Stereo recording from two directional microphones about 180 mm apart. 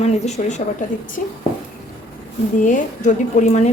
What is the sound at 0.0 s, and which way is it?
Speech, 35° left (ahead or behind).